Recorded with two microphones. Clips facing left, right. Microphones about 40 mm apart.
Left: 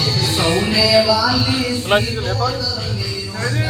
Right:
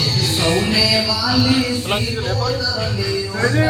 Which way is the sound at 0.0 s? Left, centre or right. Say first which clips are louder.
Left 1 dB; centre.